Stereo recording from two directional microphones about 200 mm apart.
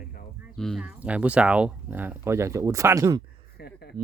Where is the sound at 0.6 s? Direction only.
Centre (ahead or behind); by 3.2 s 15° right (ahead or behind).